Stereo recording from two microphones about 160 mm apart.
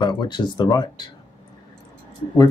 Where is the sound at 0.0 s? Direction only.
30° left (ahead or behind).